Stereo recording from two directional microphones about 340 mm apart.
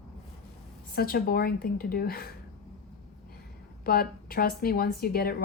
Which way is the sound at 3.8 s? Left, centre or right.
Left.